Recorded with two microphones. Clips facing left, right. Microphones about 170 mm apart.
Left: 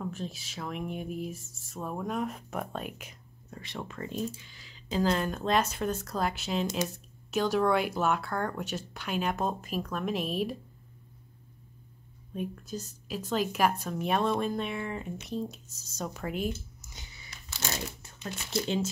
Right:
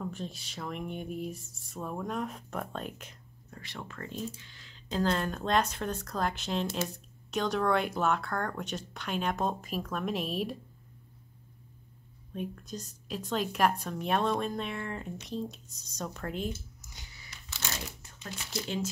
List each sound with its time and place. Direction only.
0.0 s a woman's voice: centre (ahead or behind)
3.4 s a woman's voice: 20° left (ahead or behind); by 10.5 s centre (ahead or behind)
12.3 s a woman's voice: 5° left (ahead or behind)
16.8 s a sound: 20° left (ahead or behind)
18.5 s speech: 25° left (ahead or behind)